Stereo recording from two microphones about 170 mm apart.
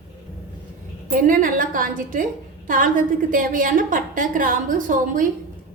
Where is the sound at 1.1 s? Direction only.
50° right (ahead or behind).